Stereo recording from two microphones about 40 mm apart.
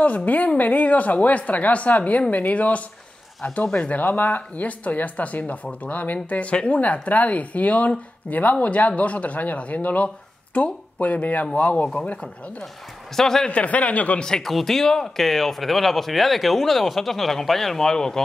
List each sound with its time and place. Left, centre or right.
0.0 s speech: left
3.9 s speech: left
13.1 s speech: centre
13.5 s speech: left
14.4 s speech: centre